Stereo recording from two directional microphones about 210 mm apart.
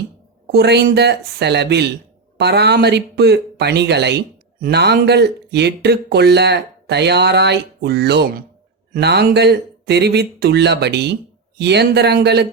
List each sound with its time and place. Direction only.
0.4 s speech: 50° right (ahead or behind)